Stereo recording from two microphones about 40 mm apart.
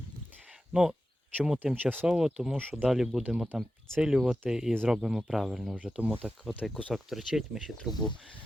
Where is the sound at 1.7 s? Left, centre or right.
Right.